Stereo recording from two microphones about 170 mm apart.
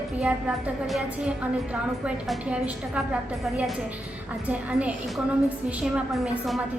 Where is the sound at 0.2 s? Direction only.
5° right (ahead or behind).